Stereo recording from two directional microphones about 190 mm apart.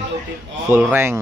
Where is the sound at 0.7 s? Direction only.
10° right (ahead or behind).